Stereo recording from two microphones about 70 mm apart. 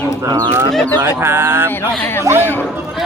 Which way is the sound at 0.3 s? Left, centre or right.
Right.